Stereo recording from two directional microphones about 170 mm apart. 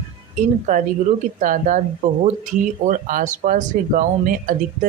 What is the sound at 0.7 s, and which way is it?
Speech, 45° right (ahead or behind).